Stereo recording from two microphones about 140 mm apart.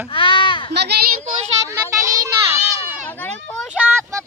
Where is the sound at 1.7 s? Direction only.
25° right (ahead or behind).